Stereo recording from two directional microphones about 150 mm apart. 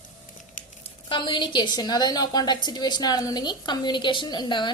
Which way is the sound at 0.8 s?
35° left (ahead or behind).